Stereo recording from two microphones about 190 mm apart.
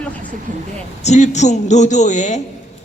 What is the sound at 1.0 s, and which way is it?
A man's voice, 35° left (ahead or behind).